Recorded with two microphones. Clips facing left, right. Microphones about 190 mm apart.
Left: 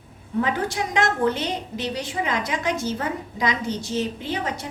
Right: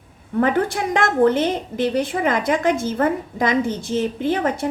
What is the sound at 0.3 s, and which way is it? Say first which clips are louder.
A woman's voice: right 5 dB; 55° right (ahead or behind).